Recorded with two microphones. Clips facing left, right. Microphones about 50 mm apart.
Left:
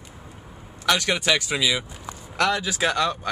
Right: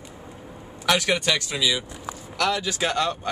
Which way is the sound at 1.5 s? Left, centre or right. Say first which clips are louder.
Left 1 dB; left.